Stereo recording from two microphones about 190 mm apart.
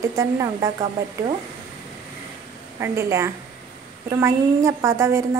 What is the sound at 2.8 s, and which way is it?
A woman's voice, 15° right (ahead or behind).